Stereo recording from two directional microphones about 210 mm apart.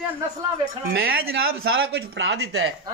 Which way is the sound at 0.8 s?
45° right (ahead or behind).